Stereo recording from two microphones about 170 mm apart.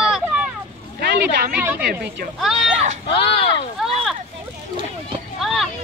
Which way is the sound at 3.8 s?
Centre (ahead or behind).